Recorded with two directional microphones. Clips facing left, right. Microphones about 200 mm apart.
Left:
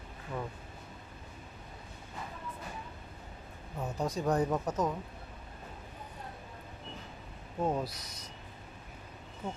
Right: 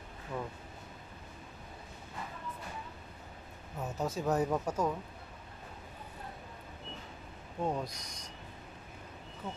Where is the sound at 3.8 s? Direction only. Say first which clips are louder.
Left 1 dB; 5° right (ahead or behind).